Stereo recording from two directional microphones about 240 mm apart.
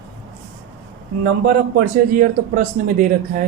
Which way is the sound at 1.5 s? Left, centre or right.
Right.